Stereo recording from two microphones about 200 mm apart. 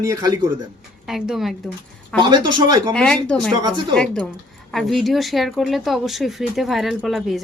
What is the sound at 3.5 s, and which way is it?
Speech, 20° right (ahead or behind).